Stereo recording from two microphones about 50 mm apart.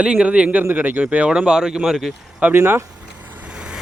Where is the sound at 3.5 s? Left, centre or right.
Centre.